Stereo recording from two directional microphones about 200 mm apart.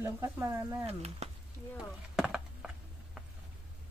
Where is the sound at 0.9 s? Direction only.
30° right (ahead or behind).